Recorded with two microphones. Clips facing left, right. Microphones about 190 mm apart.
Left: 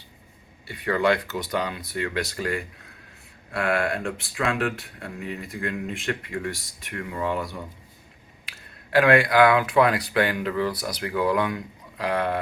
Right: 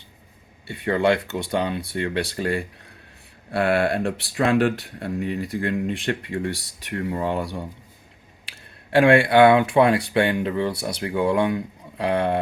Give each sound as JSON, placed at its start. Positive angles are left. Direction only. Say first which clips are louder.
{"t": 0.7, "sound": "speech", "louder": "right 2 dB", "side_deg": -25}